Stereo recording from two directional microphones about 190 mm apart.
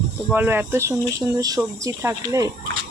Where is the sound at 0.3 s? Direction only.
10° right (ahead or behind).